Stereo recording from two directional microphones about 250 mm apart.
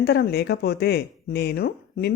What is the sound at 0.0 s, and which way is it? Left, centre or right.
Speech, left.